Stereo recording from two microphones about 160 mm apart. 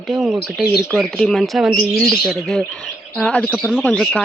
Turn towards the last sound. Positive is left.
turn(degrees=5)  # may be behind; listen again after turning